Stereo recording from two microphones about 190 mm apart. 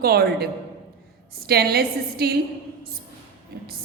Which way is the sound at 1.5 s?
55° right (ahead or behind).